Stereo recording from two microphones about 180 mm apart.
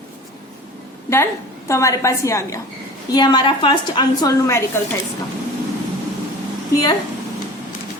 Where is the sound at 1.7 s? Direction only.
15° left (ahead or behind).